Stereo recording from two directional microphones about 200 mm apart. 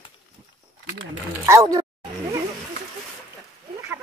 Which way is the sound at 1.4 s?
15° right (ahead or behind).